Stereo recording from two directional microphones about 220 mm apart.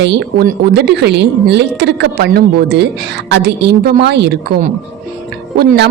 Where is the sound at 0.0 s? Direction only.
50° right (ahead or behind).